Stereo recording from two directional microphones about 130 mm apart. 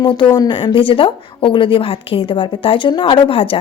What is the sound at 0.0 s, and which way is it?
A woman's voice, 35° left (ahead or behind).